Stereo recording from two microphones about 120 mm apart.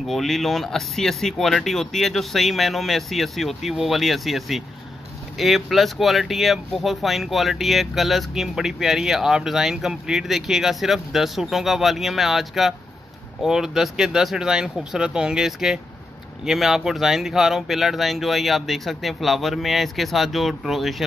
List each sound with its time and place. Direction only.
0.0 s speech: centre (ahead or behind)